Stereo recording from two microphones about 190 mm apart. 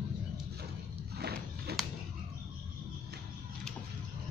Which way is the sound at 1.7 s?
55° right (ahead or behind).